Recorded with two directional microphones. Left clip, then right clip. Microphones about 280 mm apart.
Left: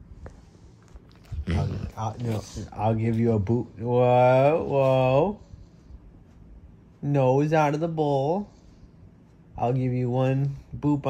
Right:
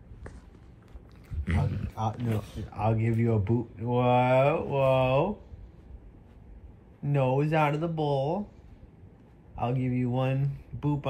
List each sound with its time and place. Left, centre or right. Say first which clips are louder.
1.4 s a sound: left 2 dB; left
2.7 s speech: left 3 dB; left
7.0 s speech: left 5 dB; left
9.6 s speech: left 4 dB; left